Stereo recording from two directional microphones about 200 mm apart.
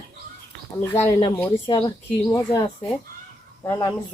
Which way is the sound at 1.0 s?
25° left (ahead or behind).